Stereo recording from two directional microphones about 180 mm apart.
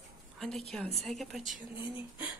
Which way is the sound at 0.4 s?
Centre (ahead or behind).